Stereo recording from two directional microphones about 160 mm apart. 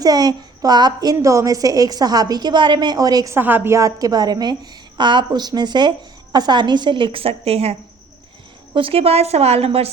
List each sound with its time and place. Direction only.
0.0 s a woman's voice: 25° right (ahead or behind)